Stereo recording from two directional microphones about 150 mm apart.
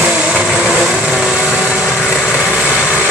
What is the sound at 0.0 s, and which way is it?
Vehicle, 5° right (ahead or behind).